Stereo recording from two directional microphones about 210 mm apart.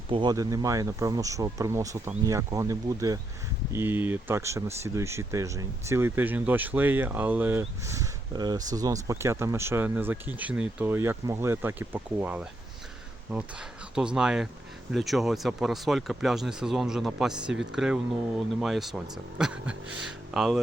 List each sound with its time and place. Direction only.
0.1 s speech: 20° right (ahead or behind); by 20.6 s centre (ahead or behind)